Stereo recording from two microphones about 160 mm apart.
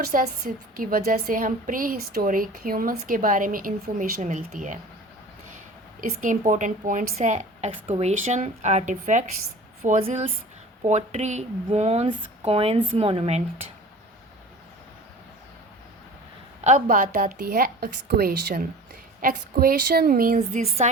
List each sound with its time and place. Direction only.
0.0 s a woman's voice: 55° right (ahead or behind)
6.0 s speech: 55° right (ahead or behind)
10.0 s speech: 40° right (ahead or behind)
16.6 s a woman's voice: 55° right (ahead or behind)
20.6 s speech: 40° right (ahead or behind)